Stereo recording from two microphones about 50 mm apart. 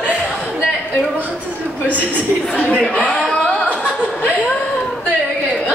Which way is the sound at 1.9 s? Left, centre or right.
Left.